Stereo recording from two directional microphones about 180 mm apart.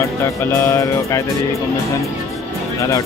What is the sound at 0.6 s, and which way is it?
Speech, 15° left (ahead or behind).